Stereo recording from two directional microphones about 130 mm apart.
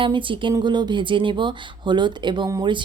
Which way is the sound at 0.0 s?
40° right (ahead or behind).